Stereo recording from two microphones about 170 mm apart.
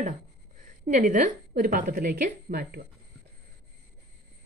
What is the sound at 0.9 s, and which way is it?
Speech, 50° right (ahead or behind).